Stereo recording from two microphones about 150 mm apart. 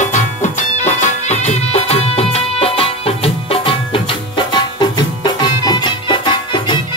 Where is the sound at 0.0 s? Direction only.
55° left (ahead or behind).